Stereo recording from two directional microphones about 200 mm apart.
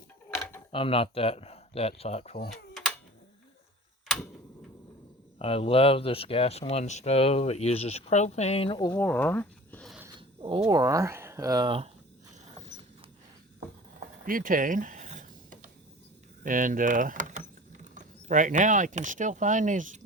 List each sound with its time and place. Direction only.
0.3 s a sound: 10° left (ahead or behind)
0.7 s speech: 25° left (ahead or behind)
5.4 s speech: 30° left (ahead or behind)
9.0 s speech: 10° left (ahead or behind)
10.2 s speech: 25° right (ahead or behind)
14.3 s a sound: 45° right (ahead or behind)
16.4 s speech: 40° right (ahead or behind)